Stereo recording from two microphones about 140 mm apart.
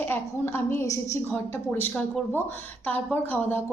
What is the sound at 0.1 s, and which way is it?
Speech, 15° left (ahead or behind).